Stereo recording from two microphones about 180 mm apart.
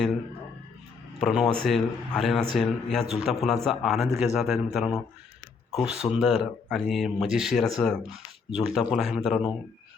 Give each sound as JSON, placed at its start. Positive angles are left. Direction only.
{"t": 1.2, "sound": "a man's voice", "side_deg": 0}